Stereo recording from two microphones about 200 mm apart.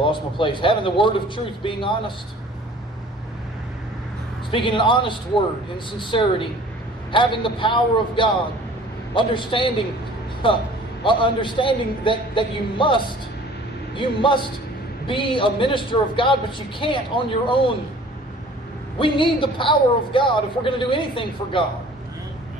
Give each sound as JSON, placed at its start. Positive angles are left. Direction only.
{"t": 0.0, "sound": "a man's voice", "side_deg": 25}
{"t": 4.5, "sound": "a man's voice", "side_deg": 25}
{"t": 18.9, "sound": "a man's voice", "side_deg": 25}